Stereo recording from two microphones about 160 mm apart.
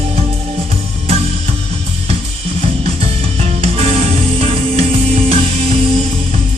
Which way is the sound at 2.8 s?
40° right (ahead or behind).